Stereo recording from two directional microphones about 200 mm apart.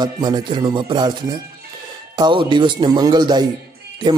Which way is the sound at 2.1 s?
25° right (ahead or behind).